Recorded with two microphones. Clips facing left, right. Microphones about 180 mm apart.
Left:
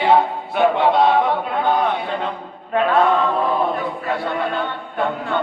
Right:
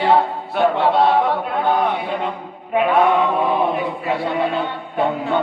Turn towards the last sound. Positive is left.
turn(degrees=-10)  # may be behind; listen again after turning